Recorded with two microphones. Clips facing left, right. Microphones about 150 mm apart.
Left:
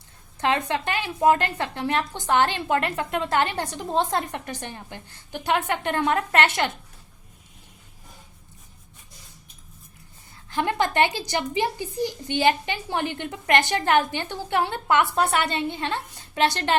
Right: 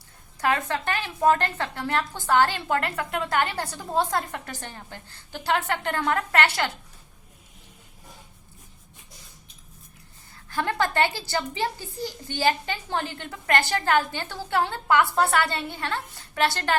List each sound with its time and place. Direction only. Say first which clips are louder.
0.3 s speech: left 1 dB; 25° left (ahead or behind)
10.5 s speech: left 2 dB; 20° left (ahead or behind)